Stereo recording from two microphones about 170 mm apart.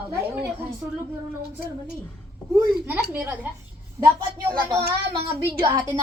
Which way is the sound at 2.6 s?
10° right (ahead or behind).